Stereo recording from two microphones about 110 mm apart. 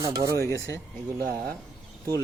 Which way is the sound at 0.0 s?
35° right (ahead or behind).